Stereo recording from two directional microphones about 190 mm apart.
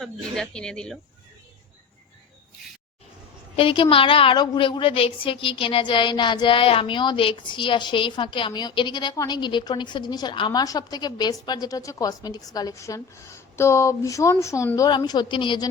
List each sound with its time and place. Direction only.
0.0 s speech: 5° left (ahead or behind)
3.5 s a woman's voice: 30° left (ahead or behind)